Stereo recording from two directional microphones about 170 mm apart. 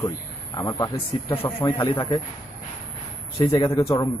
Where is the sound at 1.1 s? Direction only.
30° left (ahead or behind).